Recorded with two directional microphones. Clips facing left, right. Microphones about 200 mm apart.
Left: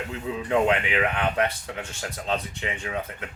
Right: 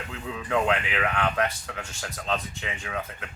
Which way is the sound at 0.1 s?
20° left (ahead or behind).